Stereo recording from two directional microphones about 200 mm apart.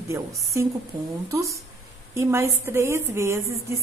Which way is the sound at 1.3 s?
15° right (ahead or behind).